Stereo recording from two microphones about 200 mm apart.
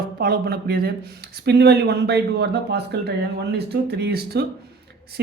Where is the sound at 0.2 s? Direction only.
50° right (ahead or behind).